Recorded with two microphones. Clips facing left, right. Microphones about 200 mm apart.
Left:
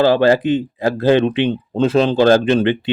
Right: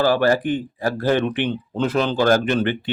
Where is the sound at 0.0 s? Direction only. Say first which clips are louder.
Left 5 dB; 20° left (ahead or behind).